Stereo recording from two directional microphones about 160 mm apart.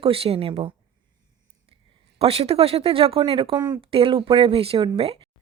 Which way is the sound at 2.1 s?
40° right (ahead or behind).